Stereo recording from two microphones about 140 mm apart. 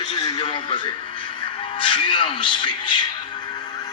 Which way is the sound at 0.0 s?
35° left (ahead or behind).